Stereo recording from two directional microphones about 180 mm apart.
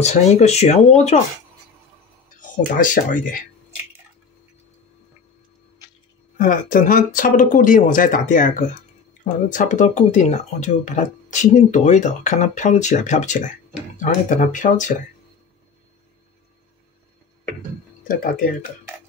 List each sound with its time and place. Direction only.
0.0 s speech: 40° left (ahead or behind)
2.3 s speech: 45° left (ahead or behind)
6.3 s speech: 50° left (ahead or behind)
18.0 s speech: 50° left (ahead or behind)